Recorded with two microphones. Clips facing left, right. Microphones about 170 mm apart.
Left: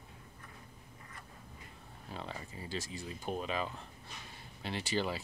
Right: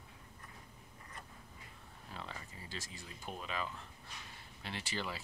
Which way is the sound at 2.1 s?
20° left (ahead or behind).